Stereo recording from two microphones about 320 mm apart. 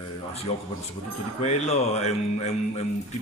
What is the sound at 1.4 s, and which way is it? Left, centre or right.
Speech, centre.